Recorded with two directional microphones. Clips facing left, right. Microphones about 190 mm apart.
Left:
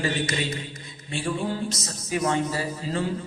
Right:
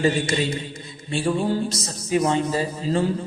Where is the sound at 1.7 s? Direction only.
30° right (ahead or behind).